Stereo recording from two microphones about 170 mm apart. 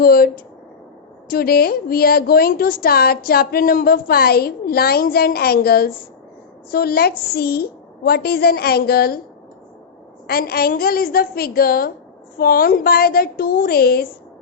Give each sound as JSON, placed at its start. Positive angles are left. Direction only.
{"t": 0.0, "sound": "a woman's voice", "side_deg": 60}
{"t": 1.3, "sound": "a woman's voice", "side_deg": 60}
{"t": 10.2, "sound": "a woman's voice", "side_deg": 65}